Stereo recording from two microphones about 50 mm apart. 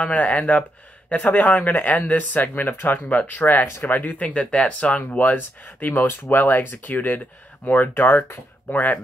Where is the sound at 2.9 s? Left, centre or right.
Left.